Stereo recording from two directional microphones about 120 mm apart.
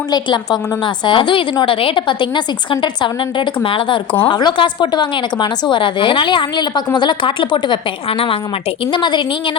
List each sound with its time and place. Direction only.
0.1 s a woman's voice: 35° left (ahead or behind)
8.9 s a woman's voice: 40° left (ahead or behind)